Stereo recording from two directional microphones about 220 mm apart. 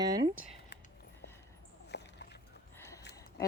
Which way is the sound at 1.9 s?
50° left (ahead or behind).